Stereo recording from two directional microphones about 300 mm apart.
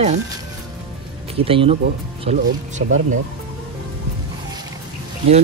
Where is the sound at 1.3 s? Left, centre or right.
Centre.